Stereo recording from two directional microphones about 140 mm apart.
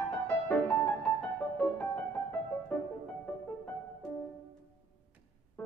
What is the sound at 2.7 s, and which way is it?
Music, 10° left (ahead or behind).